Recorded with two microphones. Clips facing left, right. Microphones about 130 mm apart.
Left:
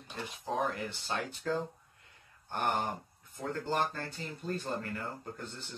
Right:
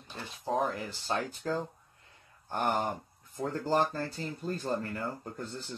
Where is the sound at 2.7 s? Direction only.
40° right (ahead or behind).